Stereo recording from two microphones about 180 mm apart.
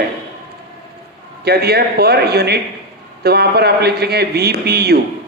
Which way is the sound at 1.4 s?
60° right (ahead or behind).